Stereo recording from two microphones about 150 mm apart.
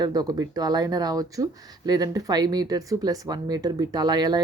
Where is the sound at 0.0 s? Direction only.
25° right (ahead or behind).